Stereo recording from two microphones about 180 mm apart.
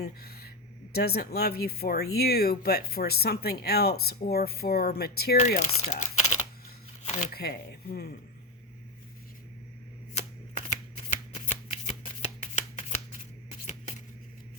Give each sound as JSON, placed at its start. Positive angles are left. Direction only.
{"t": 0.0, "sound": "speech", "side_deg": 60}
{"t": 5.5, "sound": "speech", "side_deg": 40}
{"t": 7.0, "sound": "shuffling cards", "side_deg": 35}
{"t": 7.3, "sound": "speech", "side_deg": 60}
{"t": 10.2, "sound": "shuffling cards", "side_deg": 40}